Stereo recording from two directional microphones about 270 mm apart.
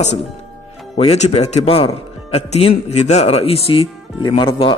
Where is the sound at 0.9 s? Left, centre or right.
Left.